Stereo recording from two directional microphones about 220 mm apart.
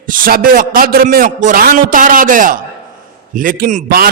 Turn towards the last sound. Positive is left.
turn(degrees=-40)  # may be behind; listen again after turning